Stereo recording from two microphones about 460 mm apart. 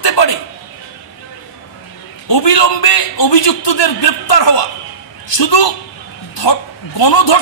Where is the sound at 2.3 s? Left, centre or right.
Left.